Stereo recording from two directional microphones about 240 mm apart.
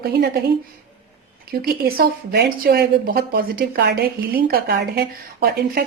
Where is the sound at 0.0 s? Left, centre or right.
Right.